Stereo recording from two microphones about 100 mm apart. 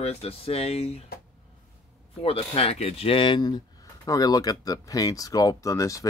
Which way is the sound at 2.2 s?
75° left (ahead or behind).